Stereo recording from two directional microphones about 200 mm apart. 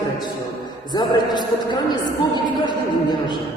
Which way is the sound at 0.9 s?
20° left (ahead or behind).